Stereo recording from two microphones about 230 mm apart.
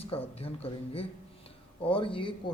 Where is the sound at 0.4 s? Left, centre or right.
Left.